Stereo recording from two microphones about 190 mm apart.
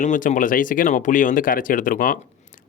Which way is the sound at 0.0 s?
40° left (ahead or behind).